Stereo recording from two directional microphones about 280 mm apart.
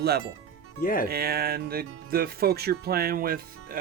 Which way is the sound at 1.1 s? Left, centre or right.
Right.